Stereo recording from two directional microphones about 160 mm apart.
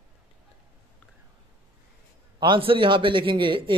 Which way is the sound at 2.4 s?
30° right (ahead or behind).